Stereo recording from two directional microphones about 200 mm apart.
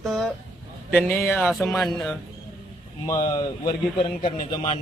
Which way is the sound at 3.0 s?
15° left (ahead or behind).